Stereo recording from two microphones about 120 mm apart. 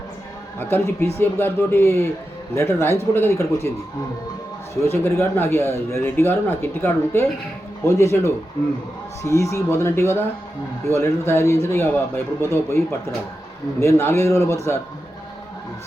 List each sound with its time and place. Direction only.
0.6 s speech: 20° left (ahead or behind)
4.8 s speech: 25° left (ahead or behind)